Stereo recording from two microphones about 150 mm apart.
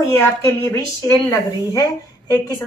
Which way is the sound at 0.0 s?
20° left (ahead or behind).